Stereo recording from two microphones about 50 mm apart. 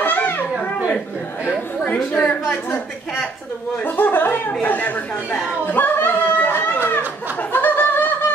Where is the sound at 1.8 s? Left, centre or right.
Left.